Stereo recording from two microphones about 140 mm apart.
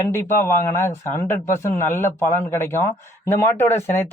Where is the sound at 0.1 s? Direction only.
20° left (ahead or behind).